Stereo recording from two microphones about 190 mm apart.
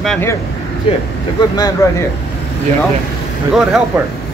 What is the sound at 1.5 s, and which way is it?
Speech, 20° left (ahead or behind).